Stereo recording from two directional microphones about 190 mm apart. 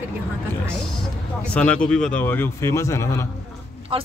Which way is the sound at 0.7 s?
Centre (ahead or behind).